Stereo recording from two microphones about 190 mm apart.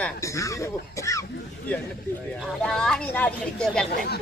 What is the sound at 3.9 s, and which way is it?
Speech, 55° left (ahead or behind).